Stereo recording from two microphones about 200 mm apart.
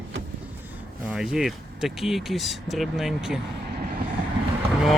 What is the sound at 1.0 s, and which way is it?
Speech, 5° right (ahead or behind).